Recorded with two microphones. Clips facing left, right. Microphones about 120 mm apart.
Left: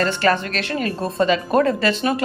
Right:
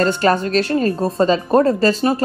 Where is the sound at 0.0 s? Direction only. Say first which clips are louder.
Right 3 dB; 40° right (ahead or behind).